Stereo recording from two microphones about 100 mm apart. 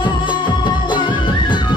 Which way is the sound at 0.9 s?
50° left (ahead or behind).